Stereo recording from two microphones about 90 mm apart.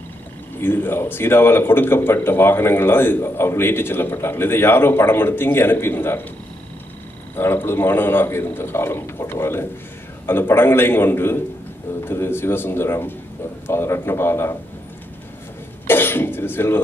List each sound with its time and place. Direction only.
0.6 s speech: 25° left (ahead or behind)
7.3 s speech: 25° left (ahead or behind)
15.9 s throat clearing: 25° left (ahead or behind)